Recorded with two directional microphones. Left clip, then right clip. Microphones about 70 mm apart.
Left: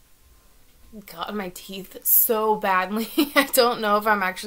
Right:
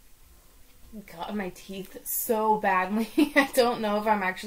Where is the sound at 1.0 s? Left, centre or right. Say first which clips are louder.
Left 4 dB; left.